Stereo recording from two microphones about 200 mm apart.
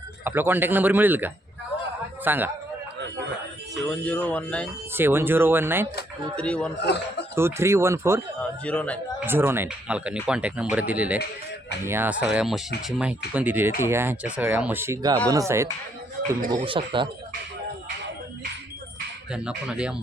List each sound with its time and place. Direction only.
0.3 s speech: 10° right (ahead or behind)
3.8 s speech: 5° left (ahead or behind)
4.9 s speech: 10° right (ahead or behind)
6.3 s speech: 5° left (ahead or behind)
6.7 s speech: 60° left (ahead or behind)
7.3 s speech: 10° right (ahead or behind)
8.6 s speech: 5° left (ahead or behind)
9.2 s speech: 10° right (ahead or behind)
16.6 s speech: 25° right (ahead or behind)
19.3 s speech: 5° right (ahead or behind)